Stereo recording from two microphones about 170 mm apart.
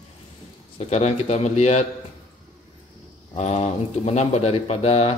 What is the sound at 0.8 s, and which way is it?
Speech, 40° left (ahead or behind).